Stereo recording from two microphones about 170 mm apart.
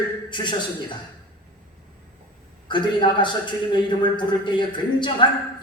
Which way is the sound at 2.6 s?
30° left (ahead or behind).